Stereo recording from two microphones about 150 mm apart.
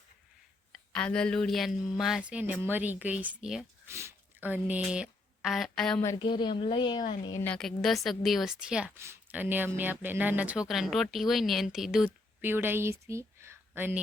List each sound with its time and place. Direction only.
0.7 s speech: 5° left (ahead or behind)
3.8 s a woman's voice: 20° right (ahead or behind); by 6.0 s 5° left (ahead or behind)
6.2 s a woman's voice: 30° left (ahead or behind)
7.3 s speech: 10° left (ahead or behind)
12.4 s speech: 15° right (ahead or behind)